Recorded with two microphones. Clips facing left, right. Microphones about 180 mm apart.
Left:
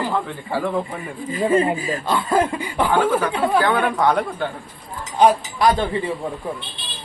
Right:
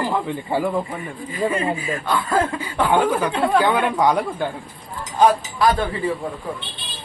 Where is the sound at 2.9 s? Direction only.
15° right (ahead or behind).